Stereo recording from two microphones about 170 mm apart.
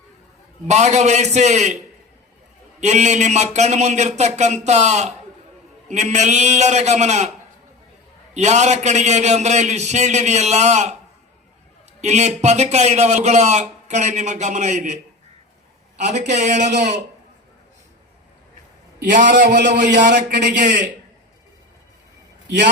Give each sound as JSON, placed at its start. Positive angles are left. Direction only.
{"t": 0.7, "sound": "a man's voice", "side_deg": -40}
{"t": 2.8, "sound": "a man's voice", "side_deg": -45}
{"t": 8.3, "sound": "a man's voice", "side_deg": -45}
{"t": 11.9, "sound": "a man's voice", "side_deg": -40}
{"t": 16.0, "sound": "a man's voice", "side_deg": -45}
{"t": 19.1, "sound": "a man's voice", "side_deg": -45}
{"t": 20.3, "sound": "a man's voice", "side_deg": -85}
{"t": 22.4, "sound": "a man's voice", "side_deg": -90}